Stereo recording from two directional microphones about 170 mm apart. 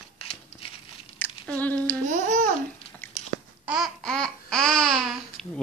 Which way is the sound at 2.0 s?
45° right (ahead or behind).